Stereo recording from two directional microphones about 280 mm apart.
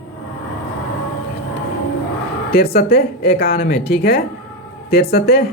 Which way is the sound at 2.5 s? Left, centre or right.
Left.